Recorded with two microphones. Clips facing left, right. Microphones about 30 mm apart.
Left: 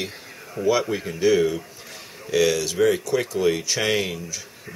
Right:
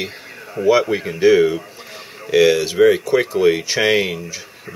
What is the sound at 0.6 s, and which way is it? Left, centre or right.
Speech, right.